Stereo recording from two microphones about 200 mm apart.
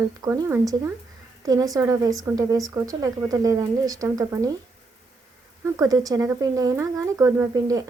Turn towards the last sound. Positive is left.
turn(degrees=-15)  # may be behind; listen again after turning